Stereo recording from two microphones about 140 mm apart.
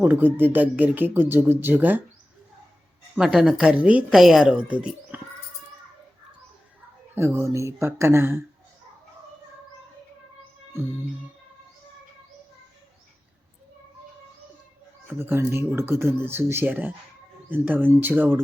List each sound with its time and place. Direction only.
0.0 s a woman's voice: 15° right (ahead or behind)
3.2 s a woman's voice: 5° right (ahead or behind)
7.2 s speech: 20° right (ahead or behind)
15.0 s a woman's voice: 15° right (ahead or behind)